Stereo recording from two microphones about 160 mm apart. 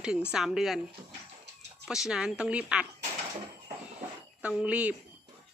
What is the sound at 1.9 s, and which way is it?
Speech, 5° right (ahead or behind).